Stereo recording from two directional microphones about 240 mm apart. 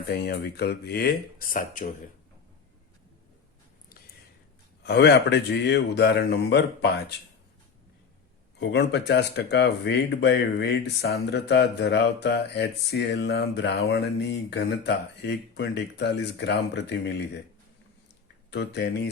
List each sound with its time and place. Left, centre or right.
0.1 s speech: left
4.8 s speech: left
8.5 s speech: left
18.5 s speech: left